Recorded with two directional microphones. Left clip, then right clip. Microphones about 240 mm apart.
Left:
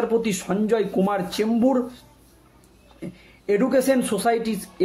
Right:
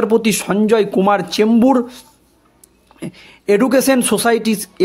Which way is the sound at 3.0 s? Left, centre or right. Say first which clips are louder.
Right 8 dB; right.